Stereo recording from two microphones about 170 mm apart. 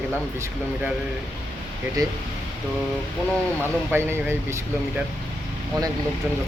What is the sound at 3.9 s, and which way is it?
Speech, 15° right (ahead or behind).